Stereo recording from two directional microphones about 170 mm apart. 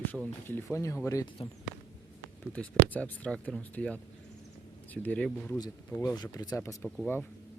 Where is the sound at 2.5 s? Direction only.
5° left (ahead or behind).